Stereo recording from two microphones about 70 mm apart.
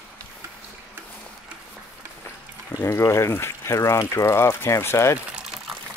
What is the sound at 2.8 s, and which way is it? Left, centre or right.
Speech, left.